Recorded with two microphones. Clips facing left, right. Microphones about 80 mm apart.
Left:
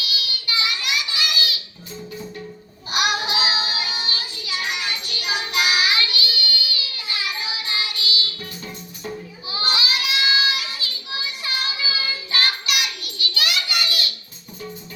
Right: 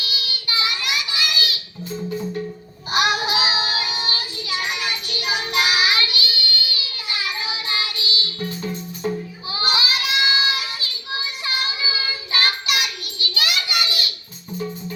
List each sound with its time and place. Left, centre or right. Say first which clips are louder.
0.0 s child singing: even; right
2.9 s child singing: right 3 dB; right
3.4 s synthetic singing: right 1 dB; right
4.0 s child singing: right 2 dB; right
13.7 s a sound: right 1 dB; right